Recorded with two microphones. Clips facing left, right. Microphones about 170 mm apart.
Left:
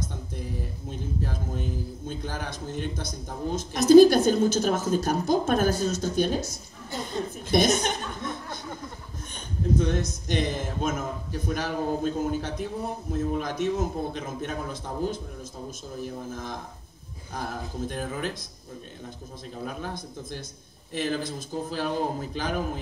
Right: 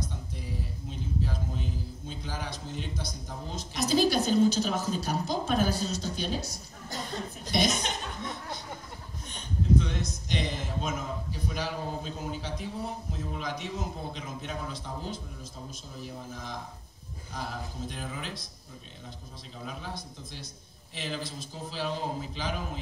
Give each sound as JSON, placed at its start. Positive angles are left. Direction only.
{"t": 1.2, "sound": "a man's voice", "side_deg": 50}
{"t": 7.5, "sound": "a man's voice", "side_deg": 50}
{"t": 9.8, "sound": "a man's voice", "side_deg": 50}
{"t": 19.6, "sound": "a man's voice", "side_deg": 50}